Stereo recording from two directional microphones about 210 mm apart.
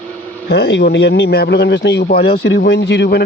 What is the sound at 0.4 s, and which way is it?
Speech, 50° left (ahead or behind).